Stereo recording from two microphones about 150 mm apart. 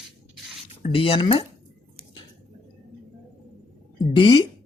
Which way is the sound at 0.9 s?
35° left (ahead or behind).